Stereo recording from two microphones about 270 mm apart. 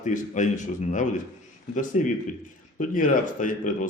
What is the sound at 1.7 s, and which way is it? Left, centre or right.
Speech, left.